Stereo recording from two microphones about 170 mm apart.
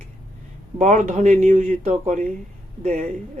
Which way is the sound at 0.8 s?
50° right (ahead or behind).